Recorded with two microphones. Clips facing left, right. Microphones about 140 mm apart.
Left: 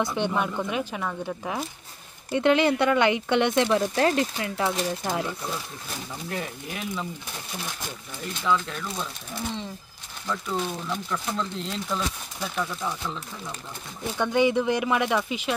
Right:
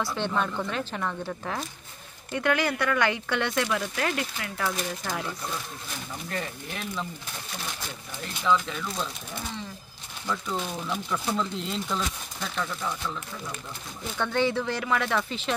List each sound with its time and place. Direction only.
0.0 s speech: 15° left (ahead or behind)
2.3 s speech: 20° left (ahead or behind)
6.3 s speech: 5° left (ahead or behind)
8.6 s speech: centre (ahead or behind)
10.2 s speech: centre (ahead or behind)
12.4 s speech: 15° left (ahead or behind)